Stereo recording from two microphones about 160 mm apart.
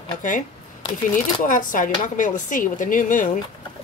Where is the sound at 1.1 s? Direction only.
55° left (ahead or behind).